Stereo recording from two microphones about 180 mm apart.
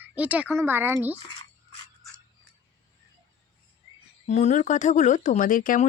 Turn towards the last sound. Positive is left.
turn(degrees=50)  # may be behind; listen again after turning